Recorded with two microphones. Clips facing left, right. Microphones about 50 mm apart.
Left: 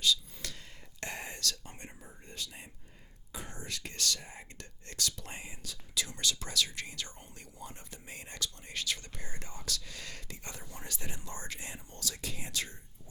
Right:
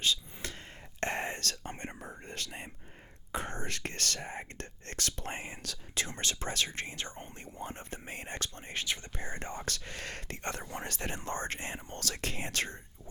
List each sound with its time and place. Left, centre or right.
0.0 s a sound: right
0.9 s whispering: right
2.0 s whispering: right
3.3 s speech: right